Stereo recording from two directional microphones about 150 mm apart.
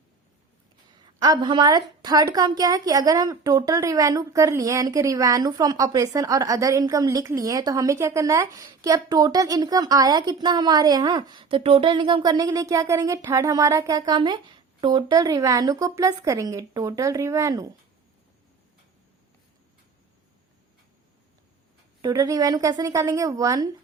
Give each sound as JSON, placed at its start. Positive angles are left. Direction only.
{"t": 1.2, "sound": "a woman's voice", "side_deg": -30}
{"t": 22.0, "sound": "a woman's voice", "side_deg": -20}